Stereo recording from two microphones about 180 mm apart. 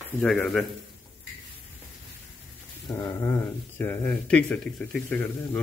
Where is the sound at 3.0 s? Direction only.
15° left (ahead or behind).